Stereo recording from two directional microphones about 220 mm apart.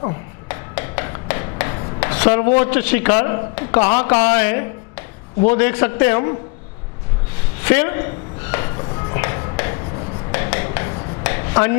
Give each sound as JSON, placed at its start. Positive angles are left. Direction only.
{"t": 0.4, "sound": "rub", "side_deg": 15}
{"t": 2.3, "sound": "speech", "side_deg": 25}
{"t": 2.6, "sound": "a man's voice", "side_deg": 10}
{"t": 7.6, "sound": "music", "side_deg": 15}
{"t": 10.3, "sound": "dishes", "side_deg": 15}